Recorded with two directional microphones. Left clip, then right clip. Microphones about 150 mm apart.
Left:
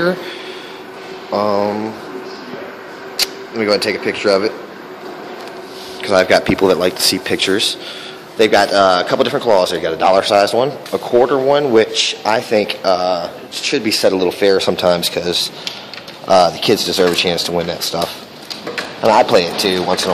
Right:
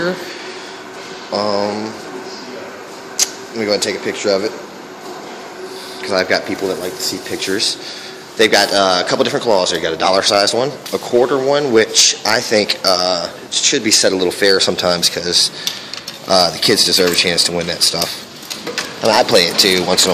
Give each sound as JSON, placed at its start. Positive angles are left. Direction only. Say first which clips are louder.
{"t": 1.3, "sound": "a sound", "louder": "left 2 dB", "side_deg": 10}
{"t": 3.2, "sound": "speech", "louder": "left 1 dB", "side_deg": 10}
{"t": 6.0, "sound": "speech", "louder": "left 4 dB", "side_deg": 20}
{"t": 6.4, "sound": "speech", "louder": "left 7 dB", "side_deg": 35}
{"t": 7.3, "sound": "speech", "louder": "left 4 dB", "side_deg": 20}
{"t": 8.4, "sound": "speech", "louder": "left 1 dB", "side_deg": 0}